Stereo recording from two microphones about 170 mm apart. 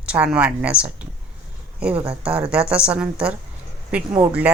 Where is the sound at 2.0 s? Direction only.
5° right (ahead or behind).